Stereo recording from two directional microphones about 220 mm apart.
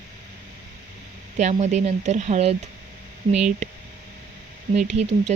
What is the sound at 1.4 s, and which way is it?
Speech, 30° right (ahead or behind).